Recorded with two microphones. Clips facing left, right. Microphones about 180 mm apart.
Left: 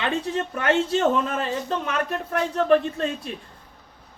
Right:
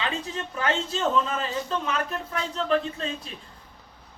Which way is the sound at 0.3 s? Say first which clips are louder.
Left 6 dB; 60° left (ahead or behind).